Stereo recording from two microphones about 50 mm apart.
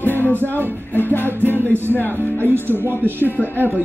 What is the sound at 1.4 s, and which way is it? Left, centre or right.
Music, right.